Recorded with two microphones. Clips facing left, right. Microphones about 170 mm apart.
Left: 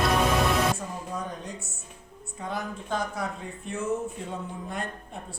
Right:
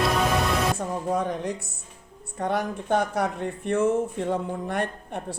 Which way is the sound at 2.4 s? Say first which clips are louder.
Right 7 dB; 70° right (ahead or behind).